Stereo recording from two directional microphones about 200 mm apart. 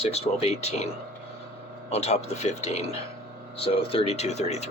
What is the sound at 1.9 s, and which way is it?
Speech, 30° left (ahead or behind).